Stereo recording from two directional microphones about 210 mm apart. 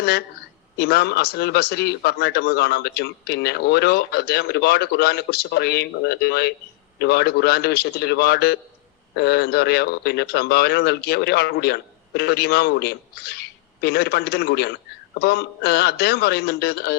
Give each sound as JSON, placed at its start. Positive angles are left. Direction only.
{"t": 0.8, "sound": "a man's voice", "side_deg": 50}